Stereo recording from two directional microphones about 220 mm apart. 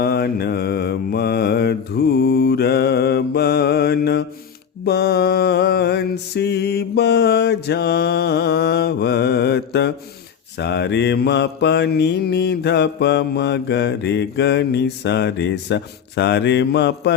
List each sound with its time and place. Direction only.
0.0 s mantra: 45° left (ahead or behind)